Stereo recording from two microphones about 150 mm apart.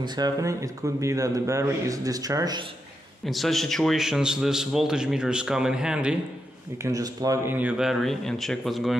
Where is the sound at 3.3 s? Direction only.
Centre (ahead or behind).